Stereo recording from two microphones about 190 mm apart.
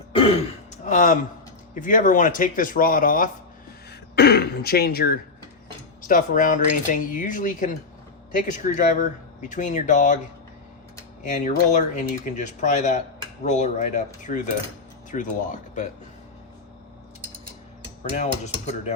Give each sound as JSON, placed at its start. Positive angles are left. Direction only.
{"t": 0.9, "sound": "speech", "side_deg": 45}
{"t": 4.1, "sound": "speech", "side_deg": 60}
{"t": 9.5, "sound": "cutlery", "side_deg": 40}
{"t": 11.2, "sound": "cutlery", "side_deg": 40}
{"t": 18.2, "sound": "cutlery", "side_deg": 35}